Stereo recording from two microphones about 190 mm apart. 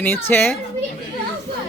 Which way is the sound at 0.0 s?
10° left (ahead or behind).